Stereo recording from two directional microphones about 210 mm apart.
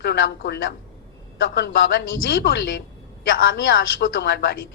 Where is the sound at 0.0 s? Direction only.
55° left (ahead or behind).